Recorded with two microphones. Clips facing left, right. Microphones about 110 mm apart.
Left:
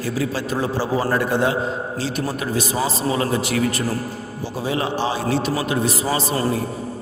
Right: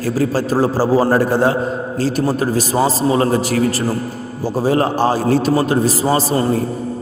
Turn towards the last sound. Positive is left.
turn(degrees=-35)  # may be behind; listen again after turning